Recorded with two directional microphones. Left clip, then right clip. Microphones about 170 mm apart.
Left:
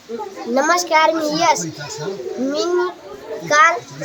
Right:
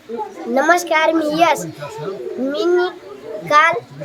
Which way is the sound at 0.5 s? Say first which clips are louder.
Right 1 dB; 15° right (ahead or behind).